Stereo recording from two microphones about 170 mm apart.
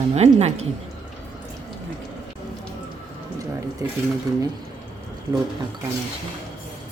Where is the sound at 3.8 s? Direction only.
20° right (ahead or behind).